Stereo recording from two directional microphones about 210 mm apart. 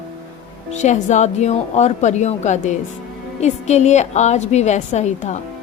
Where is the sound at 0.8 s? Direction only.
35° left (ahead or behind).